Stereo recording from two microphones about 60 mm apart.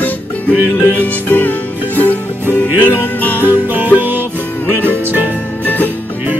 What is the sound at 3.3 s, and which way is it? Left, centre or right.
Music, right.